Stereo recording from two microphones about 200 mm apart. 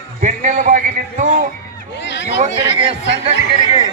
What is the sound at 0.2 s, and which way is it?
A man's voice, 40° right (ahead or behind).